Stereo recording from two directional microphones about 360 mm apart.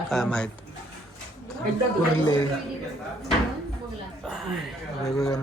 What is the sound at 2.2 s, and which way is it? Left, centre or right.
Speech, centre.